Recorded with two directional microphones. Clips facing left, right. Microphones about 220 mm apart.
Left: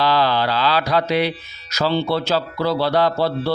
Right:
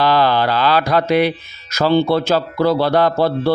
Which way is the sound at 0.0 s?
50° right (ahead or behind).